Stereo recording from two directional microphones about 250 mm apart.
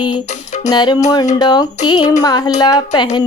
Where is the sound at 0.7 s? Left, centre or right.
Centre.